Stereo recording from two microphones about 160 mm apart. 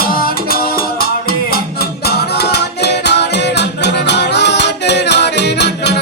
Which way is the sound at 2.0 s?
90° left.